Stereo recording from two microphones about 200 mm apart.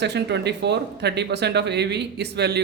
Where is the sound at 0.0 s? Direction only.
60° right (ahead or behind).